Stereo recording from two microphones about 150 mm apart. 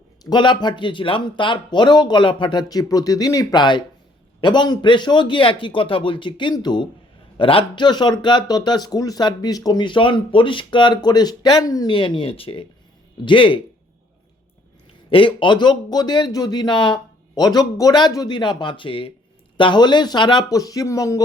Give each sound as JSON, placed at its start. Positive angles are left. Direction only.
{"t": 0.3, "sound": "a man's voice", "side_deg": 30}
{"t": 15.1, "sound": "speech", "side_deg": 35}